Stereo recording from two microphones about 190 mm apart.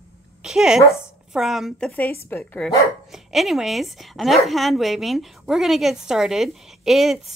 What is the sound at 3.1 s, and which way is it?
A woman's voice, centre (ahead or behind).